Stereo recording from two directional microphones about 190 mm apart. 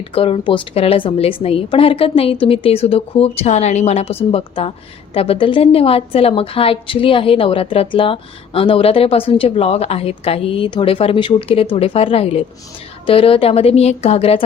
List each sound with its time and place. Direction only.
0.1 s a woman's voice: 30° left (ahead or behind)